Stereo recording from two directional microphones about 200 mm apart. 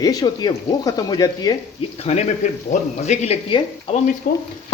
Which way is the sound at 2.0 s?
35° left (ahead or behind).